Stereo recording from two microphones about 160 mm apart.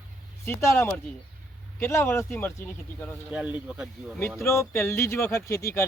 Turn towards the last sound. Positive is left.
turn(degrees=20)  # may be behind; listen again after turning